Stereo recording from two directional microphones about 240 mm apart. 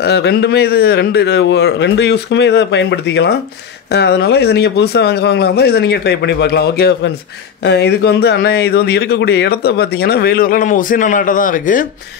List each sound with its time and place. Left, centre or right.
0.0 s a man's voice: left